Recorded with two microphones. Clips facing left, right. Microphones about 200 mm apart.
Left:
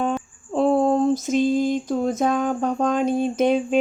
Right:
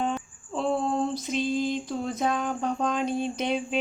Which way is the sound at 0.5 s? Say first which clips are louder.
Left 8 dB; 45° left (ahead or behind).